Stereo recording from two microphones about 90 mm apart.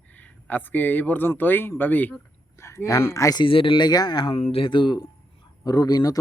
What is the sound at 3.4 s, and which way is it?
Speech, 80° left.